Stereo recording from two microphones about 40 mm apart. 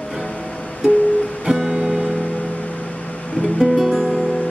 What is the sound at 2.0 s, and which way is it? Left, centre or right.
Music, left.